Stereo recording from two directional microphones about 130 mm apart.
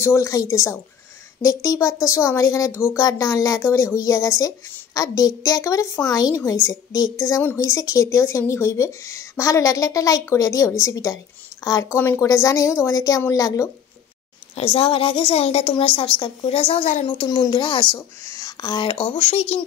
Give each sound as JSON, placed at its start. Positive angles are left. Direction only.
{"t": 0.0, "sound": "speech", "side_deg": 20}
{"t": 14.5, "sound": "a woman's voice", "side_deg": 50}
{"t": 17.0, "sound": "speech", "side_deg": 35}
{"t": 17.9, "sound": "speech", "side_deg": 25}
{"t": 19.0, "sound": "speech", "side_deg": 60}